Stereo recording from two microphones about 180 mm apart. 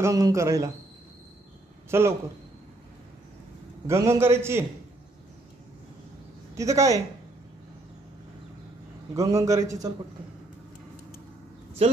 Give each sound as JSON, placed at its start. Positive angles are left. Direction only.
{"t": 0.0, "sound": "a man's voice", "side_deg": -15}
{"t": 1.9, "sound": "a man's voice", "side_deg": -15}
{"t": 3.8, "sound": "a man's voice", "side_deg": -15}
{"t": 6.5, "sound": "speech", "side_deg": -15}
{"t": 9.1, "sound": "a man's voice", "side_deg": -20}